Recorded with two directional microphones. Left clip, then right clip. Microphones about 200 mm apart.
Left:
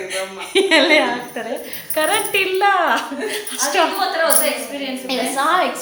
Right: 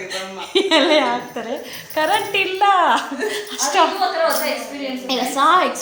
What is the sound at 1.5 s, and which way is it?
Speech, 20° right (ahead or behind).